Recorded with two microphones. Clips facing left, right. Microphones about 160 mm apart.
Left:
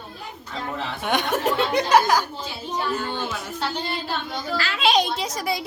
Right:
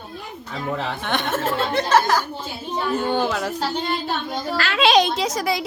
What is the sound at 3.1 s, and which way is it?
Speech, 90° right.